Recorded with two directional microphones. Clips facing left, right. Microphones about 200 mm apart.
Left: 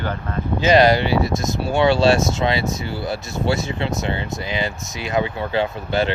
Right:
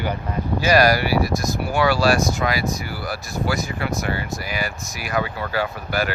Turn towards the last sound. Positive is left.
turn(degrees=25)  # may be behind; listen again after turning